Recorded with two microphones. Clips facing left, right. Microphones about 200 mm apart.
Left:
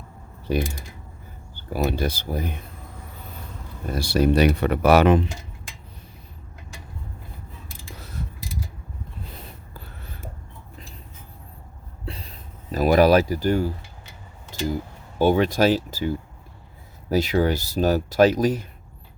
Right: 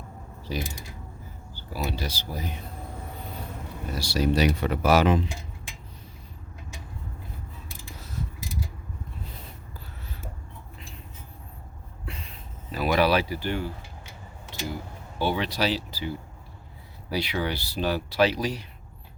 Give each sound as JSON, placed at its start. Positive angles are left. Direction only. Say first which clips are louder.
{"t": 0.4, "sound": "speech", "louder": "left 8 dB", "side_deg": 55}
{"t": 3.8, "sound": "speech", "louder": "left 5 dB", "side_deg": 55}
{"t": 12.0, "sound": "a sound", "louder": "left 4 dB", "side_deg": 35}
{"t": 12.7, "sound": "speech", "louder": "left 7 dB", "side_deg": 45}
{"t": 14.5, "sound": "a sound", "louder": "left 7 dB", "side_deg": 45}
{"t": 15.2, "sound": "speech", "louder": "left 8 dB", "side_deg": 45}